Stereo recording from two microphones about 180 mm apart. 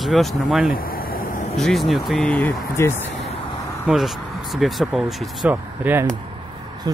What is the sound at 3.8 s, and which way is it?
Speech, centre (ahead or behind).